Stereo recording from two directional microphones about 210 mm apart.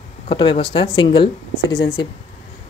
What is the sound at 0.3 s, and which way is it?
Speech, 25° left (ahead or behind).